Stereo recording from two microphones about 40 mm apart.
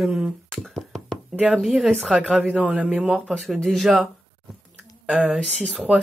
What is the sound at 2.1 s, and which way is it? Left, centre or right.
A man's voice, right.